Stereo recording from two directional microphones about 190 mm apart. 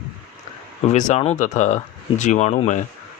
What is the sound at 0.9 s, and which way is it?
Speech, 40° left (ahead or behind).